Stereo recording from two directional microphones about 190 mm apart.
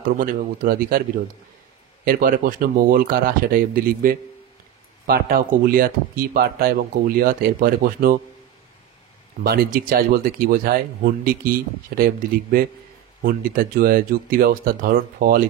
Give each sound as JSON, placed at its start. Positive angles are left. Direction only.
{"t": 0.0, "sound": "speech", "side_deg": -45}
{"t": 2.0, "sound": "speech", "side_deg": -50}
{"t": 9.4, "sound": "speech", "side_deg": -50}